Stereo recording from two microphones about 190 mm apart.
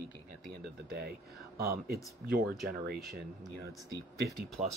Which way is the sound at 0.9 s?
55° right (ahead or behind).